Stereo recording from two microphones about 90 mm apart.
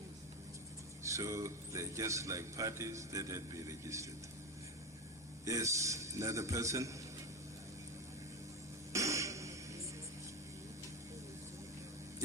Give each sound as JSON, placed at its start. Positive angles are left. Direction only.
{"t": 1.0, "sound": "speech", "side_deg": -35}
{"t": 5.5, "sound": "speech", "side_deg": -35}
{"t": 8.9, "sound": "music", "side_deg": -35}